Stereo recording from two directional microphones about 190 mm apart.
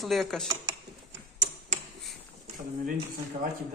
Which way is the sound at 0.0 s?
Centre (ahead or behind).